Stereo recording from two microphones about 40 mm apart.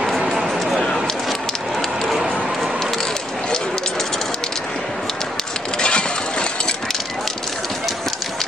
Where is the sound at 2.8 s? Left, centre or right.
Centre.